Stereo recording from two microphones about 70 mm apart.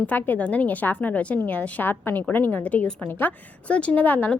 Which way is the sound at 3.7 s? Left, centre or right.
Centre.